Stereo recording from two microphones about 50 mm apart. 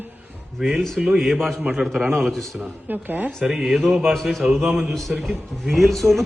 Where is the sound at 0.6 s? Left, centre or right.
Centre.